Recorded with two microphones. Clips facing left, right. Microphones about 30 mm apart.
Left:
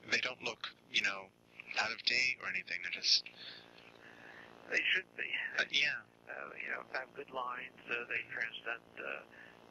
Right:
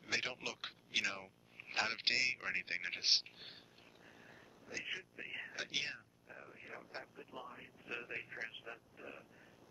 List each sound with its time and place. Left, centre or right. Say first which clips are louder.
0.0 s a man's voice: left 4 dB; centre
2.9 s a man's voice: left 3 dB; centre
4.6 s speech: left 11 dB; left
5.1 s speech: left 9 dB; left
6.9 s speech: left 8 dB; left
8.6 s speech: left 9 dB; left